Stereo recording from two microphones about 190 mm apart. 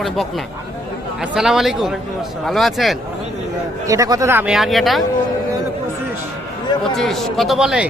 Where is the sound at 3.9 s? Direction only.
15° right (ahead or behind); by 5.0 s centre (ahead or behind).